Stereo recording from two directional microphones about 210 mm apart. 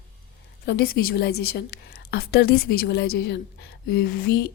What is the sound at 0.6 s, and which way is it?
A woman's voice, 45° left (ahead or behind).